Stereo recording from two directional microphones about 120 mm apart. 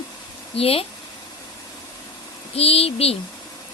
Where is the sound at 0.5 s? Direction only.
55° left (ahead or behind).